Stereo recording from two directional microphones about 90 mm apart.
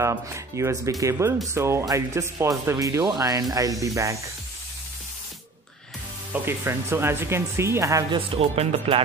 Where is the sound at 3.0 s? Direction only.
45° right (ahead or behind).